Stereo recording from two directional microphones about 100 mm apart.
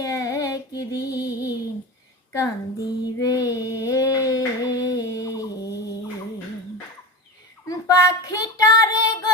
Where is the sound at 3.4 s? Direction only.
35° left (ahead or behind).